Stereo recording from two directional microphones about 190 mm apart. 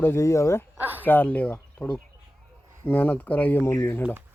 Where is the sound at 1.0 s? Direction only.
10° left (ahead or behind).